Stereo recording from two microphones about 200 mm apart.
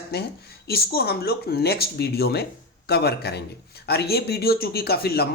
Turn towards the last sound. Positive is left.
turn(degrees=50)  # may be behind; listen again after turning